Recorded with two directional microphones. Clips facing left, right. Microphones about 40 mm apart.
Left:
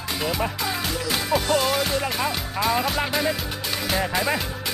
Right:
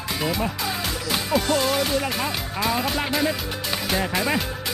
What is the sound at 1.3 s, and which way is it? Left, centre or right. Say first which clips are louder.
Music: even; centre.